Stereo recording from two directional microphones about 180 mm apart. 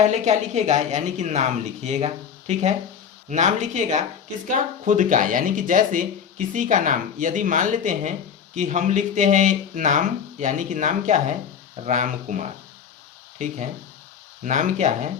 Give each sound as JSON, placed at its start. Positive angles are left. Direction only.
{"t": 0.0, "sound": "a woman's voice", "side_deg": -40}